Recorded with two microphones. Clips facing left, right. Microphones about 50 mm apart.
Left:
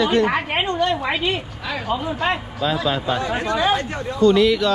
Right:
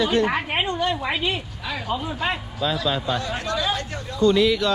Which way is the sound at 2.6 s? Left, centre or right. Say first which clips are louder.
Left 2 dB; left.